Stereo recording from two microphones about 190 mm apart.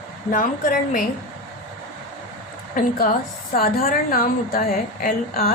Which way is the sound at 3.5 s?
50° left (ahead or behind).